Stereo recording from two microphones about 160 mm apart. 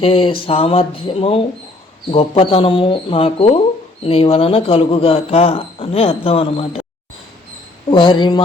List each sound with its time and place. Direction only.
0.0 s speech: 35° left (ahead or behind)
7.9 s speech: 30° left (ahead or behind)